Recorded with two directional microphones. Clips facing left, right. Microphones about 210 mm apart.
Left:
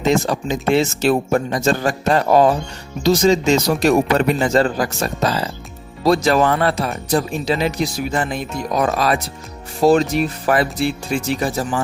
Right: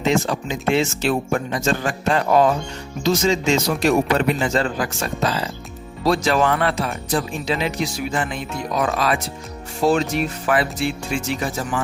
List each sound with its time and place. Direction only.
0.0 s speech: 40° left (ahead or behind)